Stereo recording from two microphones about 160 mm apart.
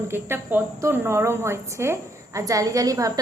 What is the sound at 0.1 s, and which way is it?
Speech, 15° right (ahead or behind).